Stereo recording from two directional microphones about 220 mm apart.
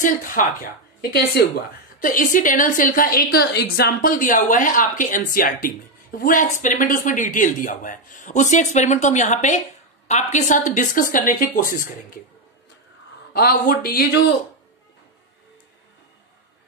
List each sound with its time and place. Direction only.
0.0 s a woman's voice: 40° left (ahead or behind)
13.3 s a woman's voice: 40° left (ahead or behind)